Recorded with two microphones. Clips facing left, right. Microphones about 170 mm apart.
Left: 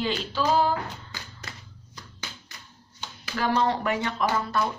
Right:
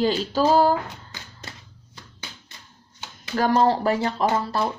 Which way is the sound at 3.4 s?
35° right (ahead or behind).